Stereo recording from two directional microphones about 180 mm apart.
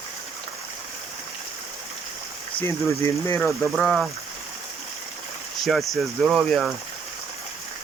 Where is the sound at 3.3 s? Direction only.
5° left (ahead or behind).